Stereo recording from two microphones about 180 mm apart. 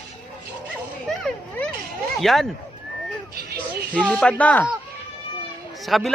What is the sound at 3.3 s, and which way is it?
Music, 60° right (ahead or behind).